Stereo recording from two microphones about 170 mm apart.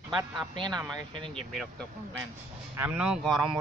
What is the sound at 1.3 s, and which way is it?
Speech, 5° left (ahead or behind).